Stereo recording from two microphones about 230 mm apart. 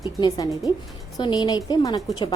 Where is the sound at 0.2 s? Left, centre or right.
Centre.